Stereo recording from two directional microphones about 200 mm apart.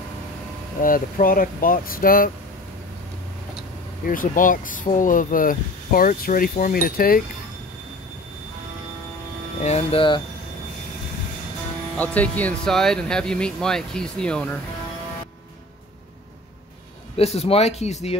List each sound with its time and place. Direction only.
0.7 s speech: 45° left (ahead or behind)
4.0 s speech: 45° left (ahead or behind)
9.6 s speech: 35° left (ahead or behind)
12.0 s speech: 10° left (ahead or behind)
17.2 s speech: 30° left (ahead or behind)